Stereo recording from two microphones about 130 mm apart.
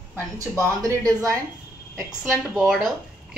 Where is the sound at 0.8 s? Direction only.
25° right (ahead or behind).